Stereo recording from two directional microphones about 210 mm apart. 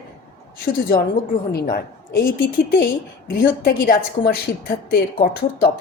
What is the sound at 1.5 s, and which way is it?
Speech, 45° left (ahead or behind).